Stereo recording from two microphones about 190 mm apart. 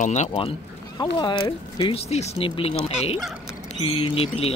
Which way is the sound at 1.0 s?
25° left (ahead or behind).